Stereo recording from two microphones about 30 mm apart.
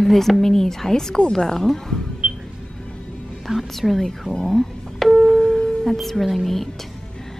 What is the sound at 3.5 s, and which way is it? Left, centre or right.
Speech, right.